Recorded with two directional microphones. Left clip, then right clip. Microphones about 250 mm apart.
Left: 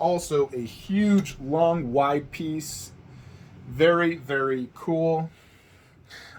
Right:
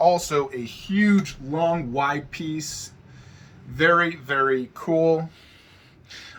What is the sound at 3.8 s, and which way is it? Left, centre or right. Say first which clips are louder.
Speech: right 2 dB; right.